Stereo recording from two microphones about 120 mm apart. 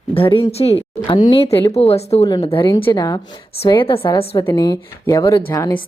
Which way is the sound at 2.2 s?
35° left (ahead or behind).